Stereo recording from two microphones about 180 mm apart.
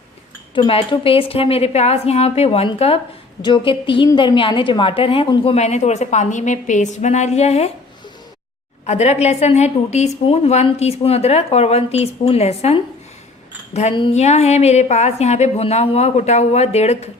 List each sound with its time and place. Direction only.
0.5 s a woman's voice: 30° left (ahead or behind)
8.9 s a woman's voice: 35° left (ahead or behind)